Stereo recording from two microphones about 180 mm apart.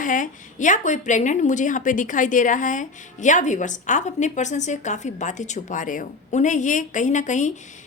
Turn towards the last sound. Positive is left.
turn(degrees=40)  # may be behind; listen again after turning